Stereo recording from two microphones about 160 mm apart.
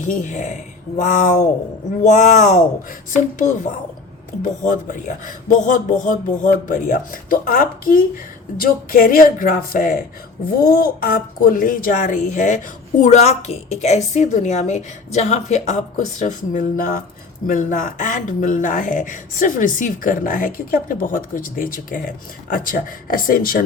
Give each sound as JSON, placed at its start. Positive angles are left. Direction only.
{"t": 0.0, "sound": "a woman's voice", "side_deg": 50}